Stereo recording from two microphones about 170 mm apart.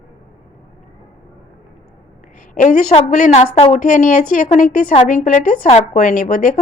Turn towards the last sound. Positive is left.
turn(degrees=50)  # may be behind; listen again after turning